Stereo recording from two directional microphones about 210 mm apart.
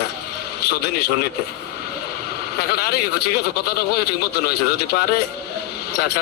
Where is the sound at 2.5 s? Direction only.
50° left (ahead or behind).